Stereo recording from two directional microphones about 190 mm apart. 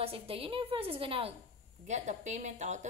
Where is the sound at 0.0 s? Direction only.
30° right (ahead or behind).